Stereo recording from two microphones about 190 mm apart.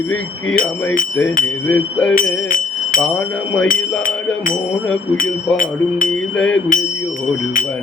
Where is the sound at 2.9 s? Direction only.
45° left (ahead or behind).